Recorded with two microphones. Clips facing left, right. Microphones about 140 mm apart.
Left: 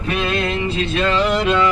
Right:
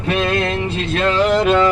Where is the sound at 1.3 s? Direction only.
40° right (ahead or behind).